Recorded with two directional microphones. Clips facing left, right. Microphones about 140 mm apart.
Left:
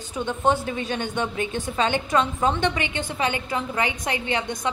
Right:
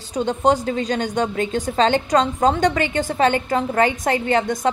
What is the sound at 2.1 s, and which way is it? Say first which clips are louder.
A woman's voice: right 5 dB; 40° right (ahead or behind).